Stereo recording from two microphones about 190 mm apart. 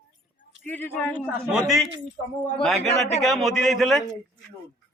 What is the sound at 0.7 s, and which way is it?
A man's voice, 10° left (ahead or behind).